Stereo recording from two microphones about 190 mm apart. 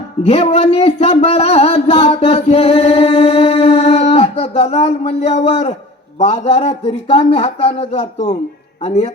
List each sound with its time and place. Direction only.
0.2 s a man's voice: 30° left (ahead or behind)